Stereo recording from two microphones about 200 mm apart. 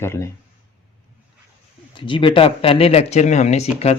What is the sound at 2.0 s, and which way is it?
Speech, 25° left (ahead or behind).